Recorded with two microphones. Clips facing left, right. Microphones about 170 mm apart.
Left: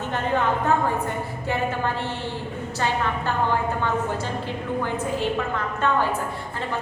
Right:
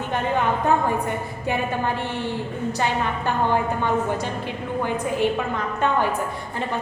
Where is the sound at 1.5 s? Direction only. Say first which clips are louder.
Right 2 dB; 15° right (ahead or behind).